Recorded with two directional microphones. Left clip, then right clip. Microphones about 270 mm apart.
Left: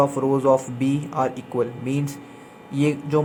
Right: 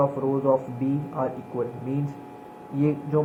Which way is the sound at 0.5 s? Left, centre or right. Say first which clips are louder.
Left 4 dB; left.